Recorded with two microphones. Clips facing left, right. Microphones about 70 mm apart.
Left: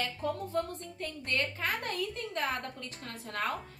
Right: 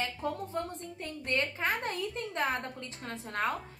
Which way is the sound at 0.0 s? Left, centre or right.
Centre.